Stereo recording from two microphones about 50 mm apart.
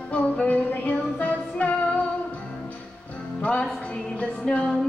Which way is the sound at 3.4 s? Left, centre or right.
Left.